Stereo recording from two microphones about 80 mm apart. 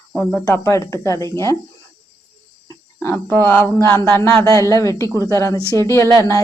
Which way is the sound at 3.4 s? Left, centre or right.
Left.